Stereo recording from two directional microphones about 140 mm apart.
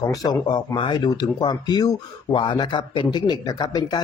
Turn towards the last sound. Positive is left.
turn(degrees=30)  # may be behind; listen again after turning